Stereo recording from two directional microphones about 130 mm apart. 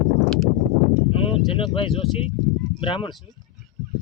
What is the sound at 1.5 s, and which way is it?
Speech, 40° left (ahead or behind).